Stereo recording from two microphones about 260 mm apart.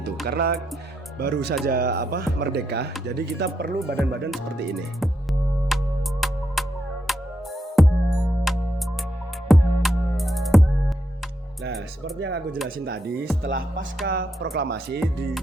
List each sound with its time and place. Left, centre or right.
0.3 s speech: right
5.6 s music: centre
12.6 s speech: right